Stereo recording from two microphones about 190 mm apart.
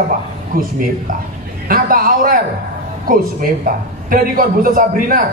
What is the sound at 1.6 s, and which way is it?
A man's voice, 50° right (ahead or behind).